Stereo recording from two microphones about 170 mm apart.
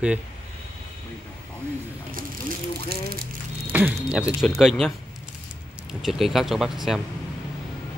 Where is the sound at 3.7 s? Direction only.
10° right (ahead or behind).